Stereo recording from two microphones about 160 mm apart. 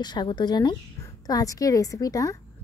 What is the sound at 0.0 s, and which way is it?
Speech, 25° left (ahead or behind).